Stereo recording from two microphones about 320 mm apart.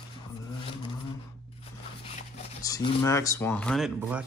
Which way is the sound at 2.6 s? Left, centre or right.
Centre.